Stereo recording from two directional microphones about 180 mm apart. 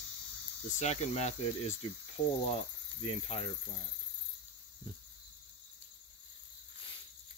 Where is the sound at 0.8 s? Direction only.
35° left (ahead or behind).